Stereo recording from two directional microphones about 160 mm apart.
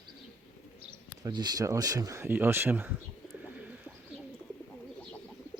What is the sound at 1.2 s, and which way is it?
Speech, 25° right (ahead or behind).